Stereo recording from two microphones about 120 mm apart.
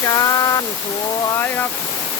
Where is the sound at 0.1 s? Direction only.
30° left (ahead or behind).